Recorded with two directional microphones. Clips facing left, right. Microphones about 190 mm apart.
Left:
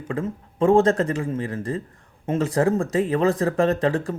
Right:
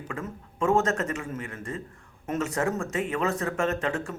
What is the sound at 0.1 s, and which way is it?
Speech, 30° left (ahead or behind).